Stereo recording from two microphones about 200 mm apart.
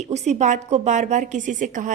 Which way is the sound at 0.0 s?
35° right (ahead or behind).